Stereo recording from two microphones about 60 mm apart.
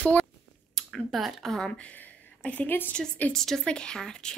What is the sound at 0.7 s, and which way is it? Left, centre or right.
Speech, centre.